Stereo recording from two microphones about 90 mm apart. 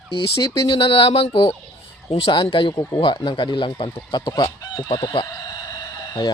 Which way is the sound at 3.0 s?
60° left (ahead or behind).